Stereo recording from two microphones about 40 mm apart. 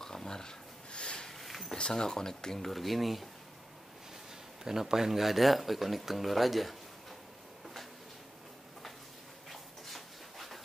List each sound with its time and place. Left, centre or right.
0.0 s a sound: centre
1.4 s a sound: centre
1.8 s speech: centre
2.7 s speech: centre
4.6 s speech: centre
9.5 s dog: centre